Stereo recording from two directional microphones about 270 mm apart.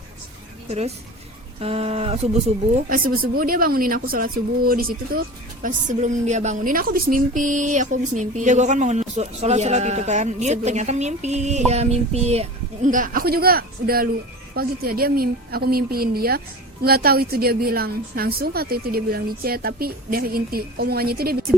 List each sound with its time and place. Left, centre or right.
1.6 s a woman's voice: right
2.9 s a woman's voice: right